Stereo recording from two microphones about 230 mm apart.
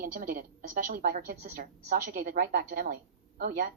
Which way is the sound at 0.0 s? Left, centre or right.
Right.